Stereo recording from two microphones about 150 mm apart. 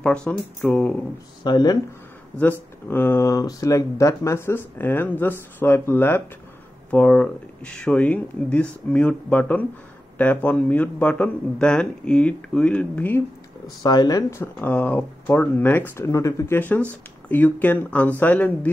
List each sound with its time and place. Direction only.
0.0 s speech: 5° left (ahead or behind)
1.4 s speech: 25° left (ahead or behind)
2.9 s speech: 15° left (ahead or behind)
13.8 s speech: 25° left (ahead or behind)